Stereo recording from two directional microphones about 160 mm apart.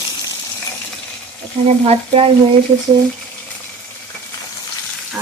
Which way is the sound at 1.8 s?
40° right (ahead or behind).